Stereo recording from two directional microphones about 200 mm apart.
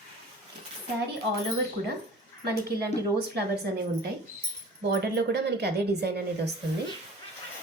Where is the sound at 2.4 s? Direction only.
50° right (ahead or behind).